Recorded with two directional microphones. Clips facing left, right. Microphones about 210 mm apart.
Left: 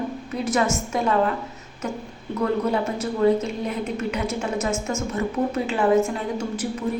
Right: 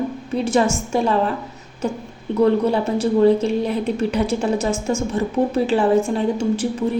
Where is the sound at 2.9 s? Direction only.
30° right (ahead or behind).